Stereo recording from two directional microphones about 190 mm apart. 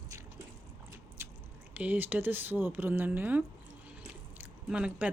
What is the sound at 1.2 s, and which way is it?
Squish, 15° right (ahead or behind).